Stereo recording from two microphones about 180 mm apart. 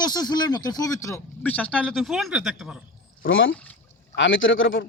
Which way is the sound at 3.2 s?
90° left.